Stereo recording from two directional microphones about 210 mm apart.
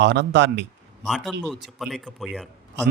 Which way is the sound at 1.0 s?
Centre (ahead or behind).